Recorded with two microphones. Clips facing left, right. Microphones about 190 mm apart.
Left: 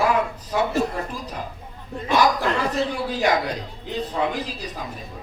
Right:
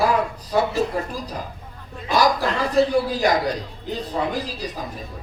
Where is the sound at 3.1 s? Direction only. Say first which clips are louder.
Right 1 dB; 35° right (ahead or behind).